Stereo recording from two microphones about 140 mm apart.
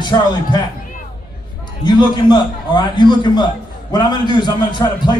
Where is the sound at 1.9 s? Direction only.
30° left (ahead or behind).